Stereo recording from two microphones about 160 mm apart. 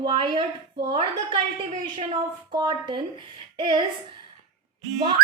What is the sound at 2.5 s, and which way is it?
A woman's voice, 30° right (ahead or behind).